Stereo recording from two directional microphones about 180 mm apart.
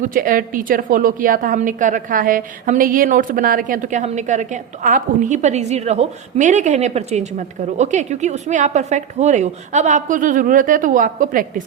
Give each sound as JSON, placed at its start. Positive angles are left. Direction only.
{"t": 0.0, "sound": "a woman's voice", "side_deg": -50}